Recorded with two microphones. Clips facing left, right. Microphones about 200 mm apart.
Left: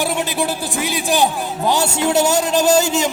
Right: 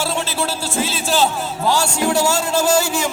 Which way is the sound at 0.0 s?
15° left (ahead or behind).